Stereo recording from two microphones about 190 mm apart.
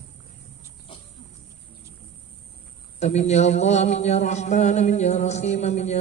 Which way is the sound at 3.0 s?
35° left (ahead or behind).